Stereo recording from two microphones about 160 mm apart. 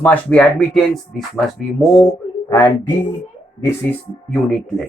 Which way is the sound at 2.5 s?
30° left (ahead or behind).